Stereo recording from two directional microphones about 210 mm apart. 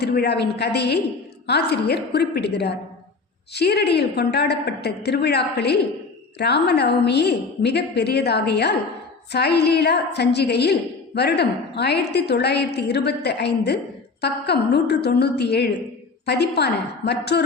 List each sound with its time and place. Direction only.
0.0 s a woman's voice: 50° left (ahead or behind)